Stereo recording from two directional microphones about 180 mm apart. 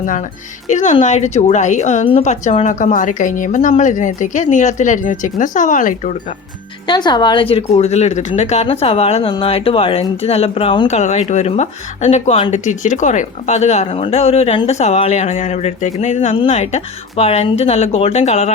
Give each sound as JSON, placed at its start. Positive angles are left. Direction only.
{"t": 0.0, "sound": "a woman's voice", "side_deg": 45}
{"t": 6.8, "sound": "speech", "side_deg": 25}
{"t": 10.8, "sound": "speech", "side_deg": 40}